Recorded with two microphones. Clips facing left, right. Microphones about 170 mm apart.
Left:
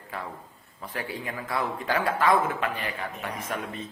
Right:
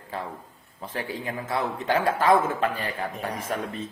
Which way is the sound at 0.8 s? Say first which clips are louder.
Right 2 dB; 30° right (ahead or behind).